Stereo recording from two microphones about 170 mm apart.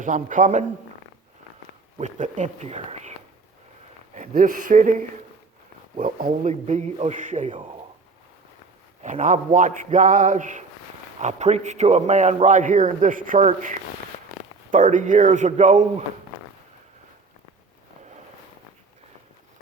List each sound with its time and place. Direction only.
0.0 s a man's voice: 50° right (ahead or behind)
2.0 s a man's voice: 45° right (ahead or behind)
9.0 s a man's voice: 45° right (ahead or behind)